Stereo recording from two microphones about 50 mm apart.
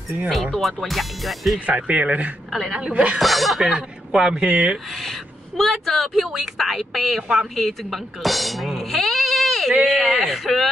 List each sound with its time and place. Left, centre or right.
0.3 s a woman's voice: centre
1.8 s a woman's voice: right
2.5 s a woman's voice: centre
3.2 s speech: centre
3.6 s a man's voice: centre
4.5 s a woman's voice: right
5.6 s a woman's voice: centre